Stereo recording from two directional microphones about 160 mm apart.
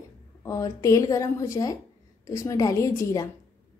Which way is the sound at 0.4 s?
20° left (ahead or behind).